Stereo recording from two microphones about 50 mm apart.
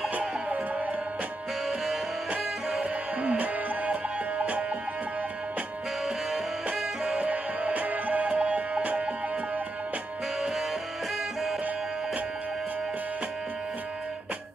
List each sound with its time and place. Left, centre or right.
0.1 s music: right
2.3 s music: right
6.7 s music: right